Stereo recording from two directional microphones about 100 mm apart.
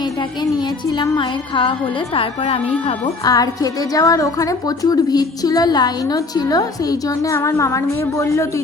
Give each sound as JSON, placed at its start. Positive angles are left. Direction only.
{"t": 0.9, "sound": "music", "side_deg": 40}
{"t": 2.1, "sound": "a woman's voice", "side_deg": 65}
{"t": 3.2, "sound": "a woman's voice", "side_deg": 35}